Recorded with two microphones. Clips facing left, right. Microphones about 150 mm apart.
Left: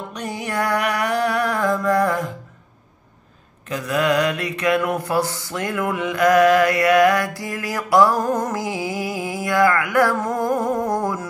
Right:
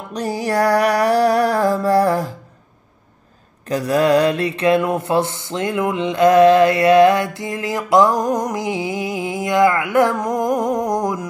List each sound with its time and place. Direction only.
0.1 s music: 35° right (ahead or behind)
3.6 s mantra: 35° right (ahead or behind); by 11.2 s 15° right (ahead or behind)